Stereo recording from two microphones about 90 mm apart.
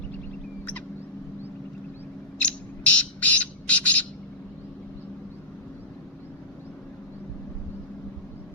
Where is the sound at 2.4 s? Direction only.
15° left (ahead or behind).